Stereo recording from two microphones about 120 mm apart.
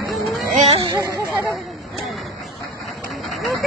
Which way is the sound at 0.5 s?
60° right (ahead or behind).